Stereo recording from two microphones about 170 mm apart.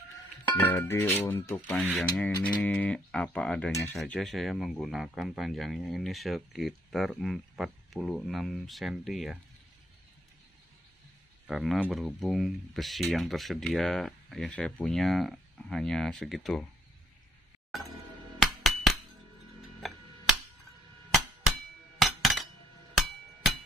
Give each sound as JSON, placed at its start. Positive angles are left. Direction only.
{"t": 0.6, "sound": "speech", "side_deg": 15}
{"t": 11.4, "sound": "speech", "side_deg": 0}
{"t": 17.7, "sound": "music", "side_deg": 0}
{"t": 19.8, "sound": "tick-tock", "side_deg": 0}
{"t": 21.1, "sound": "a sound", "side_deg": 0}